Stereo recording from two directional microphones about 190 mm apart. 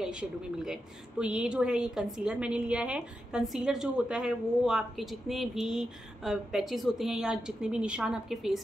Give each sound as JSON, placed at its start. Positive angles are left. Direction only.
{"t": 0.0, "sound": "a woman's voice", "side_deg": -5}